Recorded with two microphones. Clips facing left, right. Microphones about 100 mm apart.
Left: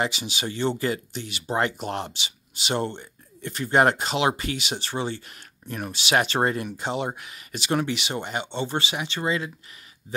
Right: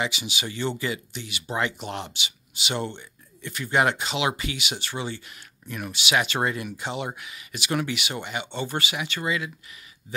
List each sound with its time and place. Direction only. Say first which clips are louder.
0.0 s speech: left 2 dB; 35° left (ahead or behind)